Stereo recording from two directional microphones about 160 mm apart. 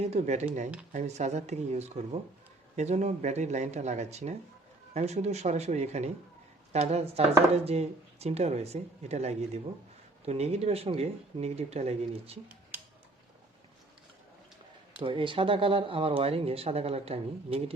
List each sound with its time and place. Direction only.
0.0 s speech: 45° right (ahead or behind)
15.0 s speech: 30° right (ahead or behind)